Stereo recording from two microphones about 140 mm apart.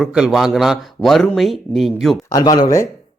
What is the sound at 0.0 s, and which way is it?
Speech, 5° right (ahead or behind).